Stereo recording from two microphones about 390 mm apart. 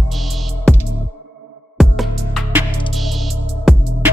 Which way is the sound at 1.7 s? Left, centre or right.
Centre.